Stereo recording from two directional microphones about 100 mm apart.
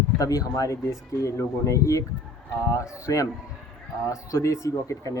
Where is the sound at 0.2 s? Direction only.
35° left (ahead or behind).